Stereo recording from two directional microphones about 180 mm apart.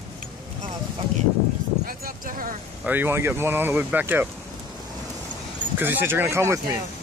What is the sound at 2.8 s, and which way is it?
Speech, 10° right (ahead or behind).